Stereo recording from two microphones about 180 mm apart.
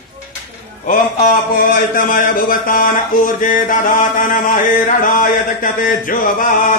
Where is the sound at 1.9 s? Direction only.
50° left (ahead or behind).